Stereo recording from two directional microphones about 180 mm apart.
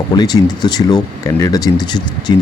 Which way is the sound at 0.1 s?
20° left (ahead or behind).